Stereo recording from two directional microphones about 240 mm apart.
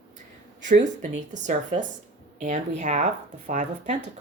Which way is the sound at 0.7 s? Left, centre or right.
Right.